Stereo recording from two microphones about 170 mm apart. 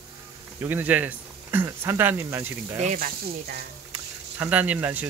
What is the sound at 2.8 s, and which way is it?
Speech, 55° right (ahead or behind).